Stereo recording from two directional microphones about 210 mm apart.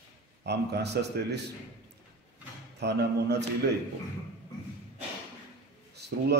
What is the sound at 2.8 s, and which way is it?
Speech, 55° right (ahead or behind).